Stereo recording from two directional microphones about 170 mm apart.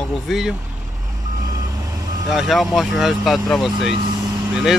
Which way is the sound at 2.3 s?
Centre (ahead or behind).